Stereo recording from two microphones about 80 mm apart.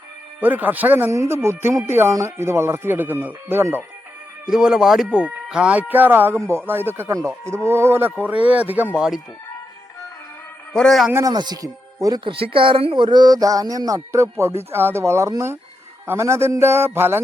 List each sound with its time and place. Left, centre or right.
0.3 s speech: right
1.1 s a man's voice: right
4.4 s speech: centre
5.9 s speech: right
7.1 s a man's voice: right
8.2 s speech: centre
9.0 s speech: centre
10.8 s a man's voice: centre
11.3 s speech: right
12.2 s a man's voice: right